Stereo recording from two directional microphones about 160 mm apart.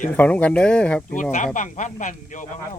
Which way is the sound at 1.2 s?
50° left (ahead or behind).